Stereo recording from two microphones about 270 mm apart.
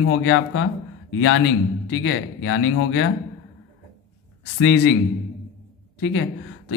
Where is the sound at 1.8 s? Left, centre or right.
Left.